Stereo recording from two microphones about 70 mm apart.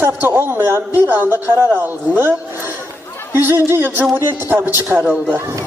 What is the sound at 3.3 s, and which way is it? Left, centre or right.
A man's voice, right.